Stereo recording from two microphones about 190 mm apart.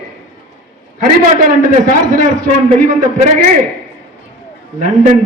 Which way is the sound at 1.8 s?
40° right (ahead or behind).